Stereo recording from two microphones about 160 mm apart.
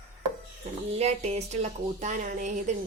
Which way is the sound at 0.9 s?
40° right (ahead or behind).